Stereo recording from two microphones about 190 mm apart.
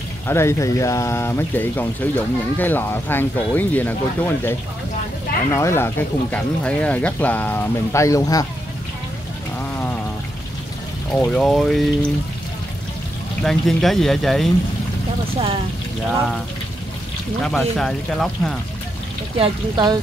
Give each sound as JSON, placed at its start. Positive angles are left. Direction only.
{"t": 0.3, "sound": "speech", "side_deg": 15}
{"t": 11.1, "sound": "speech", "side_deg": 0}
{"t": 13.4, "sound": "speech", "side_deg": 0}
{"t": 17.4, "sound": "speech", "side_deg": 0}
{"t": 19.3, "sound": "speech", "side_deg": -25}